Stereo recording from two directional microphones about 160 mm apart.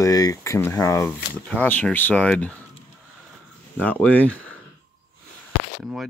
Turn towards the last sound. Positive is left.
turn(degrees=0)  # may be behind; listen again after turning